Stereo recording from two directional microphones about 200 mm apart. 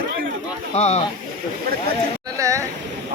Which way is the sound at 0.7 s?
35° left (ahead or behind).